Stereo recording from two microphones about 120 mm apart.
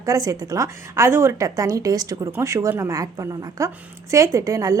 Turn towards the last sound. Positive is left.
turn(degrees=-30)  # may be behind; listen again after turning